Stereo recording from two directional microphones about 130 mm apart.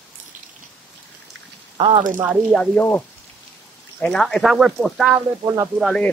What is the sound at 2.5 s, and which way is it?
Speech, 10° left (ahead or behind).